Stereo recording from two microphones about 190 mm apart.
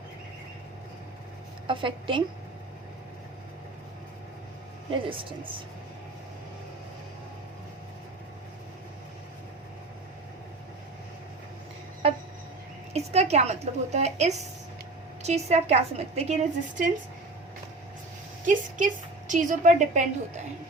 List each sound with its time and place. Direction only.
1.6 s a woman's voice: 25° right (ahead or behind)
4.9 s a woman's voice: 25° right (ahead or behind)
12.9 s a woman's voice: 35° right (ahead or behind)
19.3 s a woman's voice: 40° right (ahead or behind)